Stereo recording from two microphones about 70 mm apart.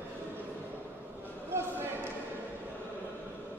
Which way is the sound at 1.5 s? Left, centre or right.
Right.